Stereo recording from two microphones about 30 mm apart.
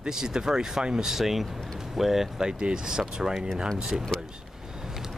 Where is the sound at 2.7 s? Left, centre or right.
Right.